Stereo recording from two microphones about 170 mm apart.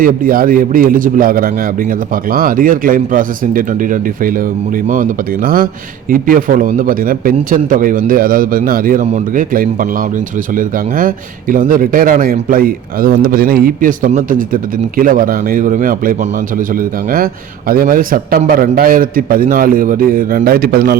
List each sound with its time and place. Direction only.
0.0 s a man's voice: 55° right (ahead or behind)